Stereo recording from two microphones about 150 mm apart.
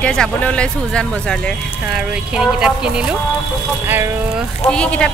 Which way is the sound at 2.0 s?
5° right (ahead or behind).